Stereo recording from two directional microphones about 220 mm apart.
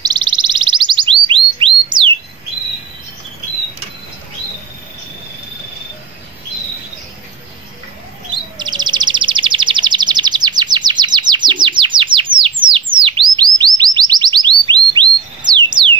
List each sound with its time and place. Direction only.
0.0 s bird: 20° right (ahead or behind)
8.3 s chirp: 20° right (ahead or behind)
12.7 s bird: 25° right (ahead or behind)